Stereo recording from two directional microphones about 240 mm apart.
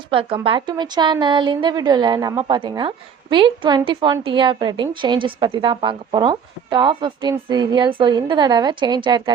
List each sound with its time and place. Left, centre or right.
0.1 s a woman's voice: right